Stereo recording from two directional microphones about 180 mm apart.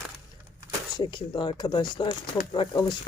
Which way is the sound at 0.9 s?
25° left (ahead or behind).